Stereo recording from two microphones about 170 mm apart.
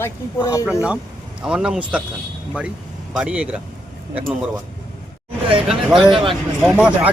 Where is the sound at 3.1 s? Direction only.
5° right (ahead or behind).